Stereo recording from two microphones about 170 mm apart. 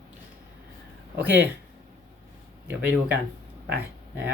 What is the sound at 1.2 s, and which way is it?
Speech, 10° right (ahead or behind).